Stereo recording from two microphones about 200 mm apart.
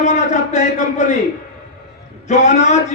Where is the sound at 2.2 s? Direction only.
35° left (ahead or behind).